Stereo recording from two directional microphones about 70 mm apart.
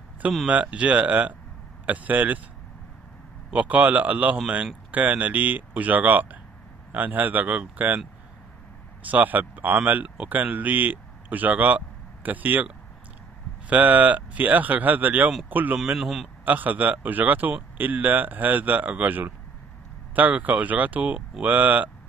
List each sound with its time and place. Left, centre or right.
0.5 s speech: centre
3.5 s speech: right
9.0 s speech: right
13.7 s speech: right
15.8 s a man's voice: centre
16.4 s speech: right